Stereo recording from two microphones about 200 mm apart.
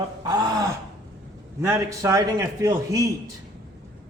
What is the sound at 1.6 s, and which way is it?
A man's voice, 15° right (ahead or behind).